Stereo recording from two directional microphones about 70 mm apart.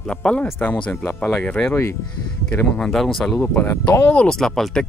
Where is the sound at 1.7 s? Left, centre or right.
Left.